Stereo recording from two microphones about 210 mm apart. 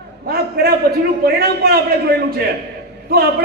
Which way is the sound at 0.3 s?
45° right (ahead or behind).